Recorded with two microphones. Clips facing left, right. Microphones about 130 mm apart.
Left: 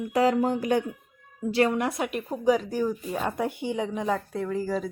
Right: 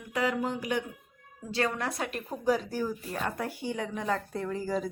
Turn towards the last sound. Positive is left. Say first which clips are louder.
# left 3 dB
turn(degrees=0)  # may be behind; listen again after turning